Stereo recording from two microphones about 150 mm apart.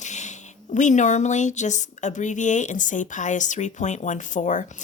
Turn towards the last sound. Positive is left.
turn(degrees=55)  # may be behind; listen again after turning